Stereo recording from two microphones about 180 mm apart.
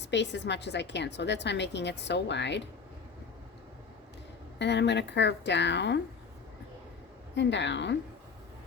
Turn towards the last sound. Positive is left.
turn(degrees=80)